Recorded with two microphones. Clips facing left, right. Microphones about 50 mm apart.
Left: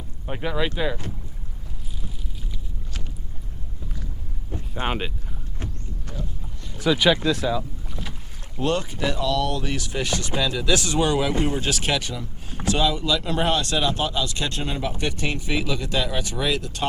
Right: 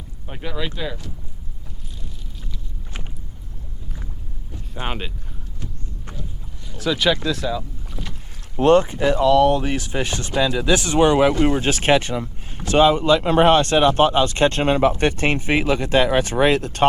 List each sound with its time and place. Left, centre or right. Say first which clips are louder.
0.3 s speech: left 3 dB; centre
4.5 s a sound: left 5 dB; left
4.9 s speech: left 2 dB; centre
5.6 s vehicle: left 1 dB; left
6.7 s speech: even; centre
8.5 s speech: right 10 dB; right